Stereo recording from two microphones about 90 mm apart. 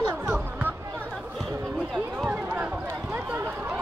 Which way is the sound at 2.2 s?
15° right (ahead or behind).